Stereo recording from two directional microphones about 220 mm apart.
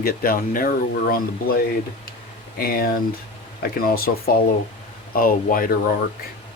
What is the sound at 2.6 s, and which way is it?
Speech, 40° left (ahead or behind).